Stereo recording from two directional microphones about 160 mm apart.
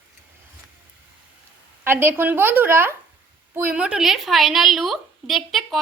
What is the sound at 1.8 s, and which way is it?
A woman's voice, 15° right (ahead or behind).